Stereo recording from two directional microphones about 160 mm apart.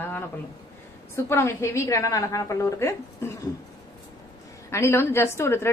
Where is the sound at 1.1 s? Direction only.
15° left (ahead or behind).